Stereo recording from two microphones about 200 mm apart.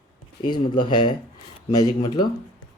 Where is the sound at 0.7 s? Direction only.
20° left (ahead or behind).